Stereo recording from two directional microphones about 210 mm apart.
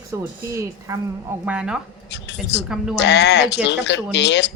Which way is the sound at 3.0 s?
55° left (ahead or behind).